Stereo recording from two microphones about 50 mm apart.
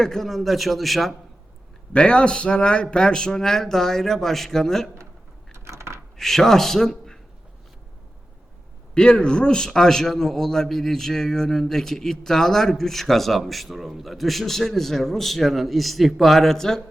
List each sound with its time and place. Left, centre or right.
0.0 s a man's voice: centre
1.9 s a man's voice: left
5.5 s coin: right
6.1 s speech: centre
9.0 s a man's voice: centre